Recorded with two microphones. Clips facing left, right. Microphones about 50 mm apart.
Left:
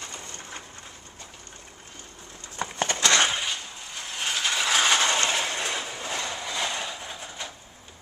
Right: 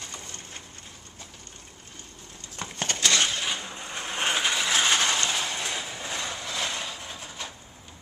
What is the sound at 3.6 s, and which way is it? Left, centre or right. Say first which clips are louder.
Mechanisms: right 3 dB; right.